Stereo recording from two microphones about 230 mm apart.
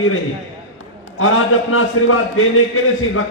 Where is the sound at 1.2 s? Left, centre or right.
Left.